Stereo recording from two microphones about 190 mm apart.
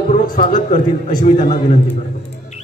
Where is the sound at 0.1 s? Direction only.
40° left (ahead or behind).